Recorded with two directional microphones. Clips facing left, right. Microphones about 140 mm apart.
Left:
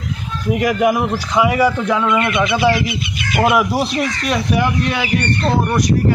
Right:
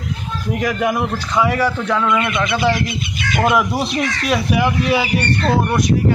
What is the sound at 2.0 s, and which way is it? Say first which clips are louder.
A man's voice: left 2 dB; 20° left (ahead or behind).